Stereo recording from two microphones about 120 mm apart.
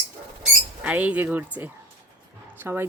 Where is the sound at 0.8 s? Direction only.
10° right (ahead or behind).